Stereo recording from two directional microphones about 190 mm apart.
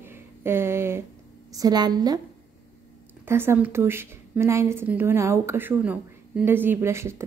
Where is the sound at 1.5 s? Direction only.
20° right (ahead or behind).